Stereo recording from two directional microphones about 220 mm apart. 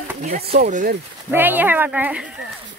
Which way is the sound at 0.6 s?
40° right (ahead or behind).